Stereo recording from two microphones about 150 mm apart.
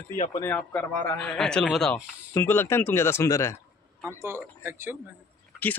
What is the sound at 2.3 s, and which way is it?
Speech, 15° left (ahead or behind).